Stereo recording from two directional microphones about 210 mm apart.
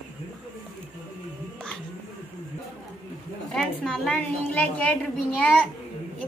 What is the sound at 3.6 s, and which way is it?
A woman's voice, 5° left (ahead or behind).